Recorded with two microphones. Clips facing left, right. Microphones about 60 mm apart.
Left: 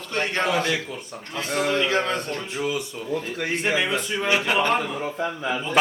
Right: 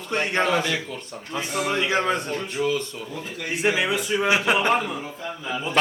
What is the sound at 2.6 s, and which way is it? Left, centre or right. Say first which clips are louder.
Speech: right 3 dB; centre.